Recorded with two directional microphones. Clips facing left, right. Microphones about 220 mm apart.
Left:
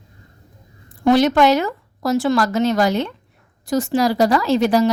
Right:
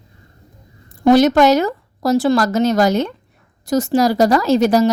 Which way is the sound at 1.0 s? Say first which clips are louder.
Right 3 dB; 40° right (ahead or behind).